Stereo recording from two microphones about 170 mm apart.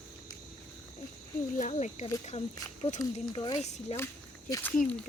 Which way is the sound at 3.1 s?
30° left (ahead or behind).